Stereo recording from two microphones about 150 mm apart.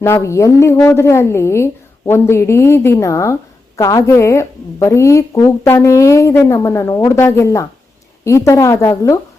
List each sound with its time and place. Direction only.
0.0 s a woman's voice: 20° left (ahead or behind)